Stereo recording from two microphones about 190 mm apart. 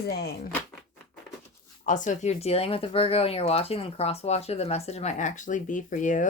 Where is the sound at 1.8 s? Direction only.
40° left (ahead or behind).